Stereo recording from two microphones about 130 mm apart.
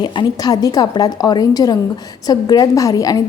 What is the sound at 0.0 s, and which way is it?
A woman's voice, 35° left (ahead or behind).